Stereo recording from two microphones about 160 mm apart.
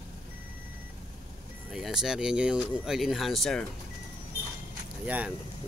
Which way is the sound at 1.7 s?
5° right (ahead or behind).